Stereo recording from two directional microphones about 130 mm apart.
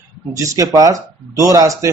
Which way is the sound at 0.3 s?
25° right (ahead or behind).